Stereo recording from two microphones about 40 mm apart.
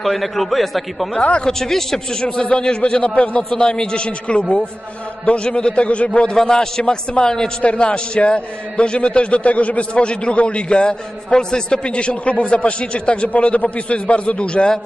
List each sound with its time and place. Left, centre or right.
0.0 s a man's voice: centre
1.4 s a man's voice: centre
2.5 s a man's voice: left
6.3 s a man's voice: centre